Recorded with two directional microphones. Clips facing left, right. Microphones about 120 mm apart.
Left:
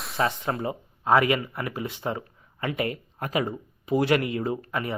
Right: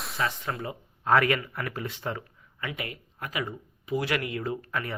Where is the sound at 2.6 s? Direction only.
35° left (ahead or behind).